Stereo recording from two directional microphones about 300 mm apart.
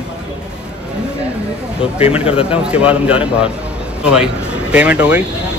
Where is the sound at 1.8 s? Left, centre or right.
Centre.